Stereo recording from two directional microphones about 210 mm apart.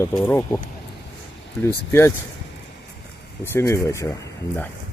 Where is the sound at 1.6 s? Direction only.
10° left (ahead or behind).